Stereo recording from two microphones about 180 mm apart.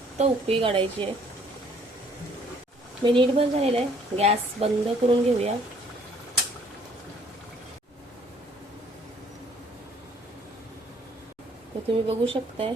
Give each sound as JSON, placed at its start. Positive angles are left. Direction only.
{"t": 0.2, "sound": "speech", "side_deg": -30}
{"t": 3.0, "sound": "speech", "side_deg": -30}
{"t": 11.9, "sound": "speech", "side_deg": -30}